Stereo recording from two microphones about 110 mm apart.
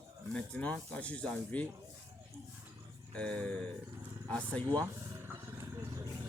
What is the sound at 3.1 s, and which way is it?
Speech, 10° left (ahead or behind).